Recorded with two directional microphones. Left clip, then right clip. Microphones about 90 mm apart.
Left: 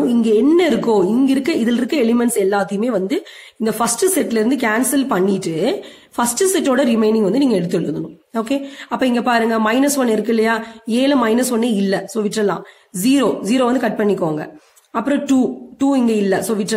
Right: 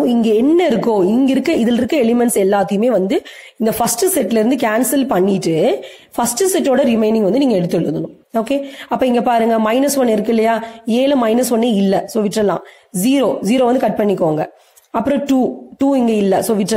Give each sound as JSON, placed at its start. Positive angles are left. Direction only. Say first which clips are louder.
{"t": 0.1, "sound": "a sound", "louder": "right 1 dB", "side_deg": -60}
{"t": 0.6, "sound": "a woman's voice", "louder": "right 1 dB", "side_deg": -60}
{"t": 16.1, "sound": "a woman's voice", "louder": "right 3 dB", "side_deg": -65}